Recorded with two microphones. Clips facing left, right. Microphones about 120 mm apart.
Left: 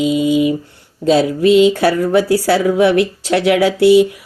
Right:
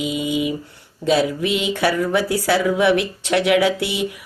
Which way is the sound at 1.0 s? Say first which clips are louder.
Left 6 dB; 35° left (ahead or behind).